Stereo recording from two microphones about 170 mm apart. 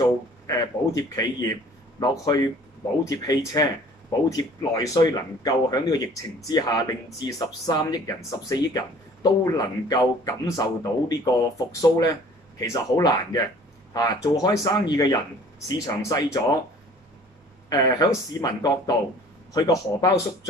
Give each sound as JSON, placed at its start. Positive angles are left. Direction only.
{"t": 0.0, "sound": "speech", "side_deg": 20}
{"t": 17.6, "sound": "speech", "side_deg": 25}